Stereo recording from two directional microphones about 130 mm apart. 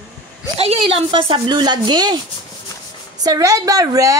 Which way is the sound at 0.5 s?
45° right (ahead or behind).